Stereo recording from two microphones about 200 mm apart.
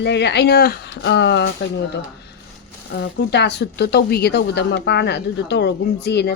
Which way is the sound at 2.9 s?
55° left (ahead or behind).